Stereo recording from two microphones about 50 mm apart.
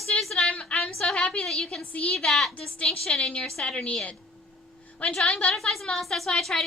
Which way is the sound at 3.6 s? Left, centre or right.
Left.